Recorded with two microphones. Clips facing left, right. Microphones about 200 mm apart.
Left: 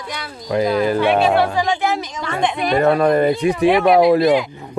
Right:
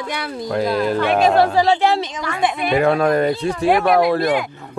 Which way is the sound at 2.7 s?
Centre (ahead or behind).